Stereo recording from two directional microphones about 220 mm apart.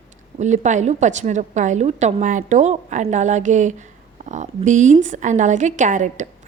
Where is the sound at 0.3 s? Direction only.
30° right (ahead or behind).